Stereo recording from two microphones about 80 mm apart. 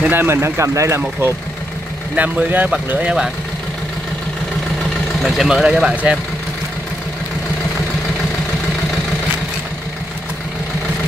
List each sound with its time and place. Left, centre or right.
0.0 s speech: right
2.1 s speech: right
5.2 s speech: centre